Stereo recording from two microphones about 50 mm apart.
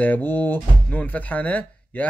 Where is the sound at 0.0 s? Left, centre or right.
Left.